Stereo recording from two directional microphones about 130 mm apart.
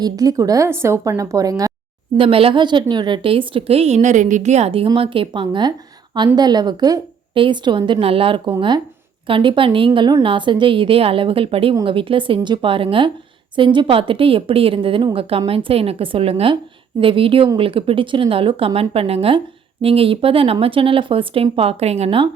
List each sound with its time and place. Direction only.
0.0 s a woman's voice: 30° right (ahead or behind)
2.1 s speech: 45° right (ahead or behind)